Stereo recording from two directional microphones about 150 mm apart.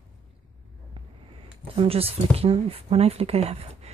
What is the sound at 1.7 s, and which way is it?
Speech, 40° right (ahead or behind).